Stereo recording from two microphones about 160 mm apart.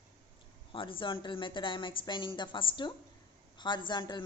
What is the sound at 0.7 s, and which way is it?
A woman's voice, 35° left (ahead or behind).